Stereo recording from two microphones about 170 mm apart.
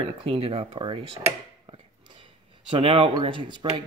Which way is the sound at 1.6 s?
30° right (ahead or behind).